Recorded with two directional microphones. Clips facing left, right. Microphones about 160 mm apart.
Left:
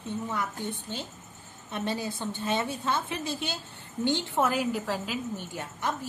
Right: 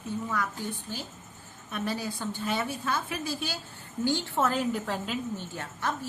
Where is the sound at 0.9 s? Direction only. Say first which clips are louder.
Left 1 dB; 20° left (ahead or behind).